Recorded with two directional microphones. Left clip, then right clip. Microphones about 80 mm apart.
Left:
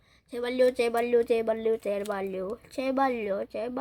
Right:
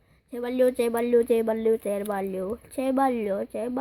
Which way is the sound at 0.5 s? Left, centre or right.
Right.